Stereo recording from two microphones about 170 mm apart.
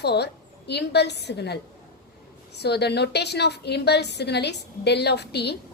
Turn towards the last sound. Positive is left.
turn(degrees=75)  # may be behind; listen again after turning